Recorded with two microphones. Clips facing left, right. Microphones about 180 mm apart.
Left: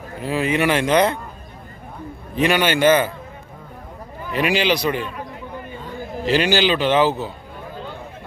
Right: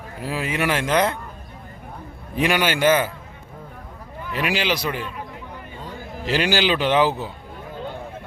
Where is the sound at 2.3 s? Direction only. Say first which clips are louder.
Left 3 dB; 10° right (ahead or behind).